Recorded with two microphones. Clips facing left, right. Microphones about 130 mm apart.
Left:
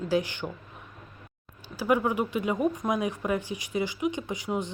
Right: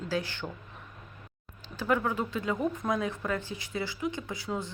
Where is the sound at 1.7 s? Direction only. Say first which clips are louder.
Left 4 dB; 15° left (ahead or behind).